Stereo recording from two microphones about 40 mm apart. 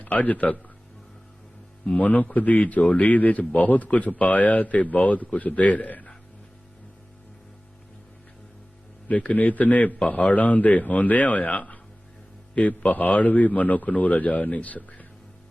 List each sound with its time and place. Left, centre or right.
0.0 s a man's voice: left
2.0 s a man's voice: left
9.0 s a man's voice: left